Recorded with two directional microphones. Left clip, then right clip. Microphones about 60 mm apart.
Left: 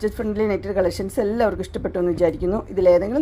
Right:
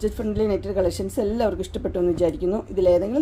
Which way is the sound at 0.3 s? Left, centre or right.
Left.